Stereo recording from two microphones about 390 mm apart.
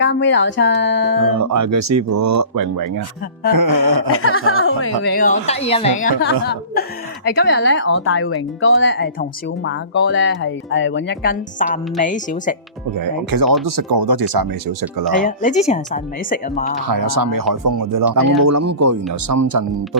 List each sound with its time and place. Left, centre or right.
0.0 s speech: left
1.4 s speech: right
3.6 s music: right
4.2 s speech: left
13.3 s speech: right
15.2 s speech: centre
16.9 s speech: right